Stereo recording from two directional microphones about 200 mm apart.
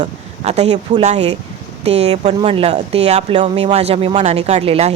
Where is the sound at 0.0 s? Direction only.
35° right (ahead or behind).